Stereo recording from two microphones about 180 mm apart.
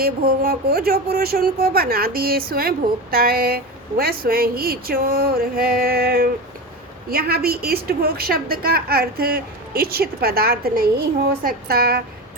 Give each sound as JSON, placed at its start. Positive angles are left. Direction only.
{"t": 0.0, "sound": "speech", "side_deg": -55}